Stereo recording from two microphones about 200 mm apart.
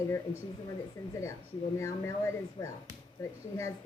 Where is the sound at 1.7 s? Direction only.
15° left (ahead or behind).